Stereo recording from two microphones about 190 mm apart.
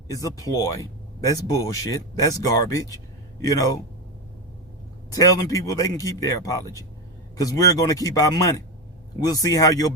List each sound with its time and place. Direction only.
0.1 s speech: 20° left (ahead or behind)
5.1 s speech: 20° left (ahead or behind)